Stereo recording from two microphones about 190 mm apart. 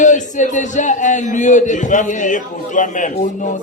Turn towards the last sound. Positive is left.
turn(degrees=40)  # may be behind; listen again after turning